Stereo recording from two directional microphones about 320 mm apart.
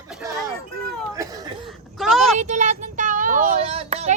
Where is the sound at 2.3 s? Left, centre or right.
Right.